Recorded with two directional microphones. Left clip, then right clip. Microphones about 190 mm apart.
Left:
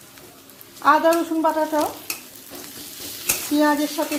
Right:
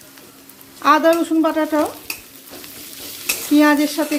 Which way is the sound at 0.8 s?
35° right (ahead or behind).